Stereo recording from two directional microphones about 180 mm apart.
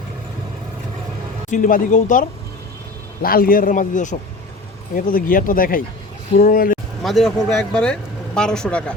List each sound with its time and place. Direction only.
1.5 s a man's voice: 45° left (ahead or behind)
7.0 s speech: centre (ahead or behind)